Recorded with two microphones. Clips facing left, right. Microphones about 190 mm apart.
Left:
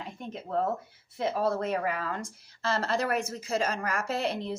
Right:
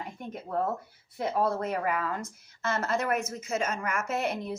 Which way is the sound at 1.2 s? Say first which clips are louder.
Even; 30° left (ahead or behind).